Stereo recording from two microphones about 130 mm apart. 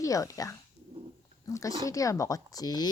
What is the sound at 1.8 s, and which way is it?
A child's voice, 25° left (ahead or behind).